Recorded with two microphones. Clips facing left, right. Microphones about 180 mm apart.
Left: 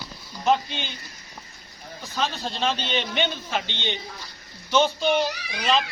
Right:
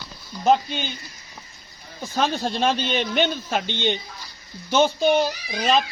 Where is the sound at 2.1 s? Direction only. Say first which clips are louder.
Right 5 dB; 50° right (ahead or behind).